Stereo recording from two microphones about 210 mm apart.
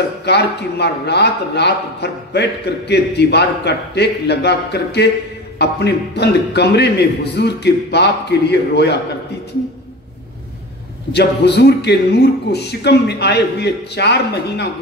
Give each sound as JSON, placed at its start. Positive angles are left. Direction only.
{"t": 0.2, "sound": "a man's voice", "side_deg": 55}
{"t": 11.1, "sound": "a man's voice", "side_deg": 55}